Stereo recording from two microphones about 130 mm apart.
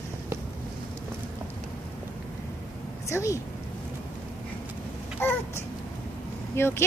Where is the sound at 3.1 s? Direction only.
25° left (ahead or behind).